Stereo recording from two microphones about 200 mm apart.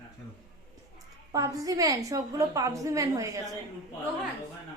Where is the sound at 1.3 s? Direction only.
15° right (ahead or behind).